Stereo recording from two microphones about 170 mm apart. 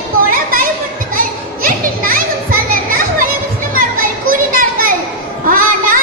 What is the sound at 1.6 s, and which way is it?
Children playing, 55° right (ahead or behind).